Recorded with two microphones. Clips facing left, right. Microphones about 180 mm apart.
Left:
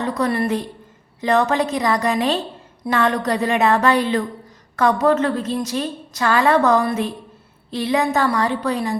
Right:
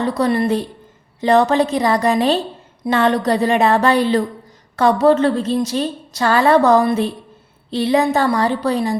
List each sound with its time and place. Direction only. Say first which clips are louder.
0.0 s a woman's voice: right 3 dB; 30° right (ahead or behind)